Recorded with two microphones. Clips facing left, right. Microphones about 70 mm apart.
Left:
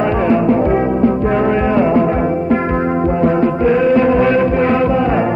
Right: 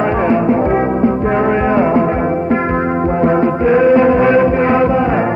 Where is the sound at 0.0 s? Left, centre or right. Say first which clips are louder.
Even; right.